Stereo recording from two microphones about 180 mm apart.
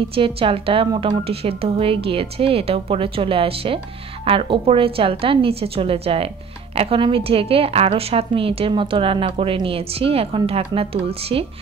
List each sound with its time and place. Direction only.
0.1 s speech: 30° right (ahead or behind)